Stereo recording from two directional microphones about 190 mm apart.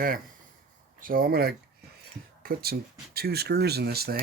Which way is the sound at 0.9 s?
45° right (ahead or behind).